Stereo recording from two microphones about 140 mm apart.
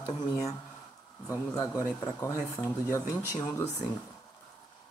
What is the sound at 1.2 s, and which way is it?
Speech, 25° left (ahead or behind).